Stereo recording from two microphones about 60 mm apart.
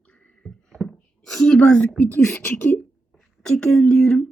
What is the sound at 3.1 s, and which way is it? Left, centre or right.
Speech, centre.